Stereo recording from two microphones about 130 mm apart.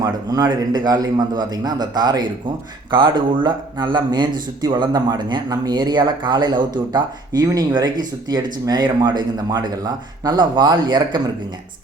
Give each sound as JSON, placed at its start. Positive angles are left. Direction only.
{"t": 0.0, "sound": "speech", "side_deg": -30}